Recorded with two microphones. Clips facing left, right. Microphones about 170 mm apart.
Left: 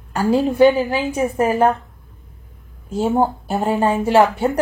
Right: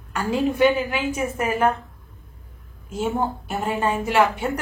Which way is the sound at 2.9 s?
35° left (ahead or behind).